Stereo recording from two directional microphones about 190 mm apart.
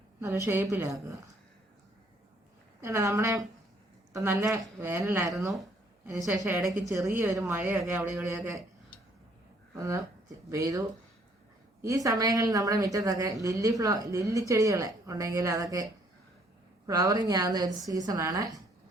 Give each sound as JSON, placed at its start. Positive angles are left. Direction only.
{"t": 0.2, "sound": "speech", "side_deg": -15}
{"t": 2.8, "sound": "speech", "side_deg": -15}
{"t": 6.2, "sound": "speech", "side_deg": -5}
{"t": 9.7, "sound": "a woman's voice", "side_deg": -15}